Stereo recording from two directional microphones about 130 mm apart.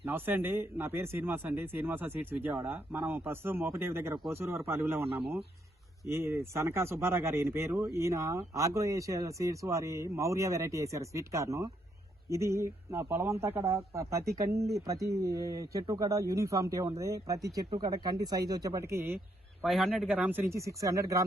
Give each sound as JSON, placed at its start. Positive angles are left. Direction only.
{"t": 0.0, "sound": "speech", "side_deg": -15}
{"t": 6.1, "sound": "speech", "side_deg": -20}
{"t": 17.7, "sound": "speech", "side_deg": -35}
{"t": 19.6, "sound": "a man's voice", "side_deg": 0}
{"t": 20.1, "sound": "speech", "side_deg": -15}